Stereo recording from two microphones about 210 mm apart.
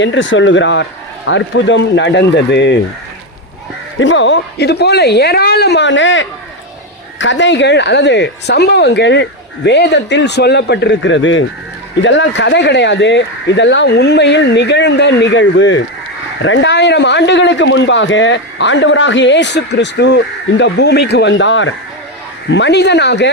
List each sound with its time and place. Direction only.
0.0 s a man's voice: 60° left (ahead or behind)
4.0 s a man's voice: 60° left (ahead or behind)